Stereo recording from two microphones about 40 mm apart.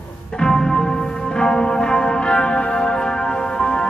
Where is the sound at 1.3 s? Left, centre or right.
Centre.